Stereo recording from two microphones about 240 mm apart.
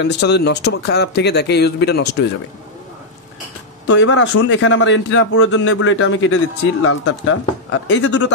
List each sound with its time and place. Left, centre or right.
0.0 s a man's voice: left
3.8 s a man's voice: left